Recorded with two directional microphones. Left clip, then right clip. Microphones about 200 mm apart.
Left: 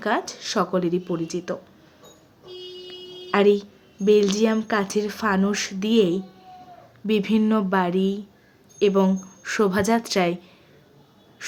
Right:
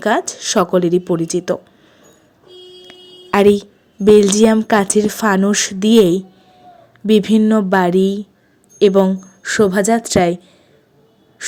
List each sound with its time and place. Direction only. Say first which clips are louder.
0.0 s speech: right 8 dB; 35° right (ahead or behind)
2.8 s a woman's voice: left 1 dB; 40° right (ahead or behind)